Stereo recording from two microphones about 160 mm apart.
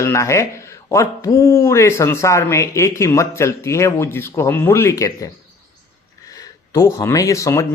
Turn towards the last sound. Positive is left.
turn(degrees=20)  # may be behind; listen again after turning